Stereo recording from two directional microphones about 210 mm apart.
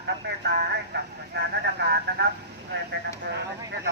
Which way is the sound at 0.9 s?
55° right (ahead or behind).